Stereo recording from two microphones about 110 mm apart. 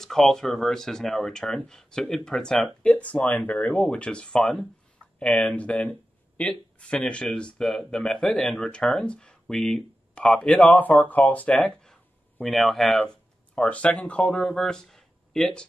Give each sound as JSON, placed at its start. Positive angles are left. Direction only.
{"t": 0.0, "sound": "speech", "side_deg": 5}